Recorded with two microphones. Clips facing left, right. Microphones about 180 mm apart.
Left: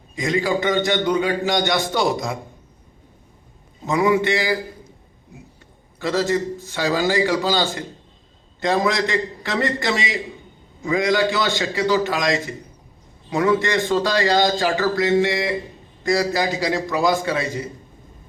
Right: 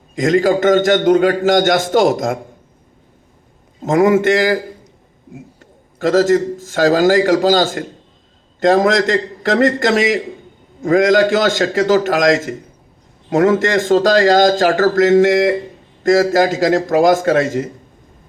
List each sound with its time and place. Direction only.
0.2 s a man's voice: 45° right (ahead or behind)
3.8 s a man's voice: 45° right (ahead or behind)
6.0 s a man's voice: 45° right (ahead or behind)